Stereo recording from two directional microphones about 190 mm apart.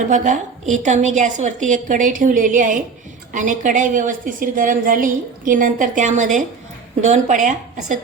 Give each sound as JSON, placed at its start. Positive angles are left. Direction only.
{"t": 0.1, "sound": "a woman's voice", "side_deg": -40}